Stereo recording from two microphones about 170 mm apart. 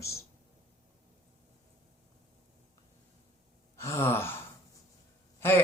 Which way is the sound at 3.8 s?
15° left (ahead or behind).